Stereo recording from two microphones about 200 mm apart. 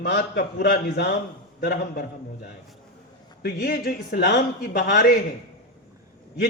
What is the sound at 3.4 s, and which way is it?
A man's voice, 50° left (ahead or behind).